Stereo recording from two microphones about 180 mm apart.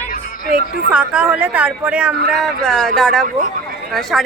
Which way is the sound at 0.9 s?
5° right (ahead or behind).